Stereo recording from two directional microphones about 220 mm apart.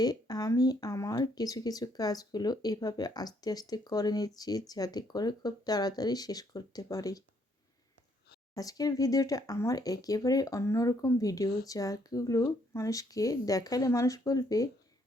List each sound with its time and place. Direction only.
0.0 s speech: 15° left (ahead or behind)
8.5 s speech: 15° left (ahead or behind)